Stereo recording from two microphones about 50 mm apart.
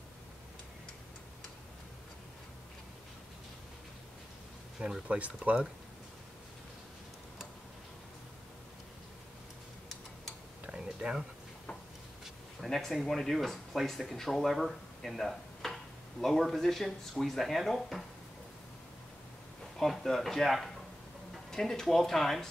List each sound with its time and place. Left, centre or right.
4.7 s speech: centre
5.0 s speech: right
10.7 s a sound: right
12.5 s speech: centre
19.8 s speech: centre